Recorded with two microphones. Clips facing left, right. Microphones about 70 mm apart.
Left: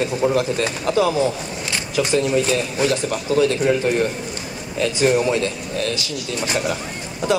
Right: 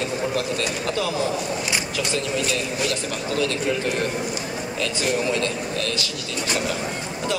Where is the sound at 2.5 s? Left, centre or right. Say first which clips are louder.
Left 5 dB; left.